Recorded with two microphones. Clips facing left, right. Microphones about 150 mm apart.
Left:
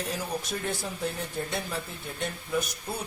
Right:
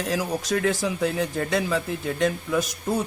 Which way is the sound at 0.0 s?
90° right.